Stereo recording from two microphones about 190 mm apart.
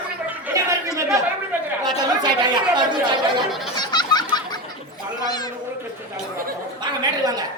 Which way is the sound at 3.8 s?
20° left (ahead or behind).